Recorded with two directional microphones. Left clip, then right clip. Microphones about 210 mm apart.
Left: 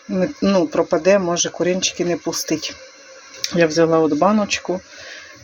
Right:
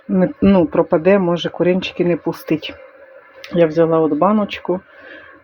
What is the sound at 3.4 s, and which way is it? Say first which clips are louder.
Speech: right 2 dB; 5° right (ahead or behind).